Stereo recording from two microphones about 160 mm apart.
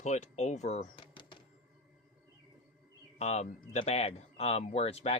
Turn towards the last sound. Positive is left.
turn(degrees=40)  # may be behind; listen again after turning